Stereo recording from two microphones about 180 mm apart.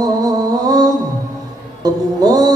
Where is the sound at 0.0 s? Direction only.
20° right (ahead or behind).